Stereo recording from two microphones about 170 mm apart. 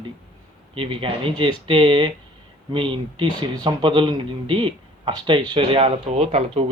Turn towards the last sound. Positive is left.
turn(degrees=-35)  # may be behind; listen again after turning